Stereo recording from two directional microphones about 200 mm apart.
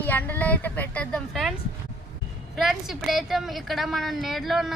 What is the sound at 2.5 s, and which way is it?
A woman's voice, centre (ahead or behind).